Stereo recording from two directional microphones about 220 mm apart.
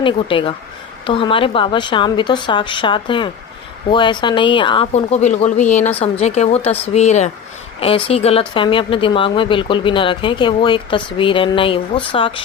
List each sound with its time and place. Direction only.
0.0 s speech: 25° left (ahead or behind)